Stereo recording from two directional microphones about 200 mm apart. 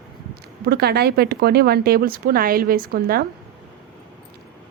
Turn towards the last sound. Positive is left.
turn(degrees=-50)  # may be behind; listen again after turning